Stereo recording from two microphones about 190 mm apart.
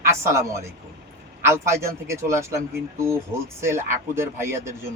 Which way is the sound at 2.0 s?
15° right (ahead or behind).